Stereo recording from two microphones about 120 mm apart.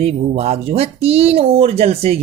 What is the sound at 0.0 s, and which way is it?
Speech, 55° right (ahead or behind).